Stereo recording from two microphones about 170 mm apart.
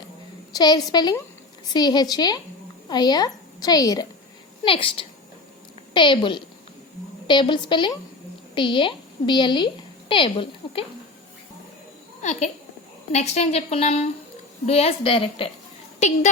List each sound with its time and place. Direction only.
0.5 s a woman's voice: 25° left (ahead or behind)
4.6 s a woman's voice: 30° left (ahead or behind)
12.2 s a child's voice: 40° left (ahead or behind)